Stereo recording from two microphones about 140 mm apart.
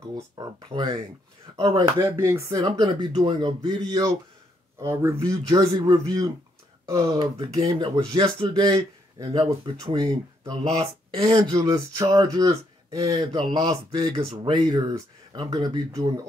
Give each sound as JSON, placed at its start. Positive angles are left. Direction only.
{"t": 0.1, "sound": "speech", "side_deg": -30}
{"t": 2.0, "sound": "speech", "side_deg": -20}
{"t": 2.5, "sound": "speech", "side_deg": -30}
{"t": 7.1, "sound": "speech", "side_deg": -35}
{"t": 11.5, "sound": "speech", "side_deg": -25}
{"t": 13.1, "sound": "speech", "side_deg": -40}